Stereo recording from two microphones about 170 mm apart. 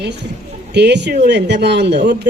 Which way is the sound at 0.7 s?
90° right.